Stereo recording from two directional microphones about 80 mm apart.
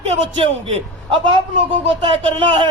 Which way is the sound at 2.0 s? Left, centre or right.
Right.